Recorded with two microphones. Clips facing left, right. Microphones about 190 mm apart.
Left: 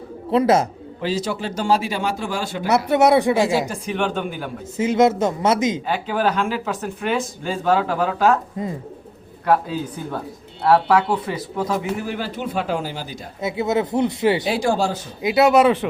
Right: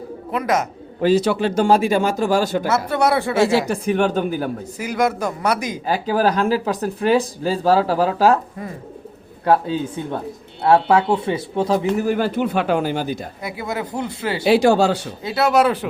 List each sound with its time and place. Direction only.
0.3 s speech: 30° left (ahead or behind)
1.0 s speech: 65° right (ahead or behind); by 2.6 s 40° right (ahead or behind)
2.6 s speech: 15° left (ahead or behind)
3.7 s speech: 45° right (ahead or behind)
4.8 s speech: 25° left (ahead or behind)
5.8 s speech: 40° right (ahead or behind)
8.6 s speech: 20° left (ahead or behind)
9.4 s speech: 30° right (ahead or behind)
11.9 s speech: 45° right (ahead or behind)
13.4 s speech: 25° left (ahead or behind)
14.4 s speech: 70° right (ahead or behind)
15.2 s speech: 15° left (ahead or behind)
15.4 s speech: centre (ahead or behind)